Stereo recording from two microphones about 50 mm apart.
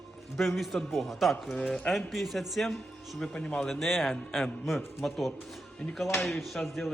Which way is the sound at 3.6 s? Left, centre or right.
Centre.